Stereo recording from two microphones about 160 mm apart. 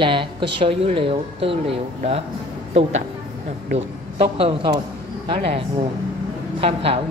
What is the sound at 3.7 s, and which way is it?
Speech, 40° right (ahead or behind).